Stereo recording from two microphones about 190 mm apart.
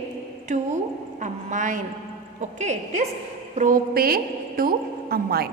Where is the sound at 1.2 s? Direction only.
40° right (ahead or behind).